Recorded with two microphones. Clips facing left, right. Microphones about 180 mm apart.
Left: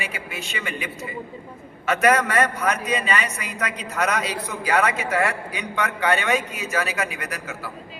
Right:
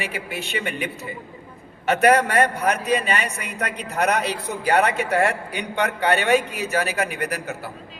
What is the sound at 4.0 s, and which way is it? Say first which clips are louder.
Speech: right 3 dB; 40° right (ahead or behind).